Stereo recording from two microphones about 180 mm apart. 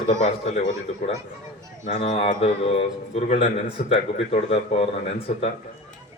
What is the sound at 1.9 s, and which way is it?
Speech, 35° left (ahead or behind).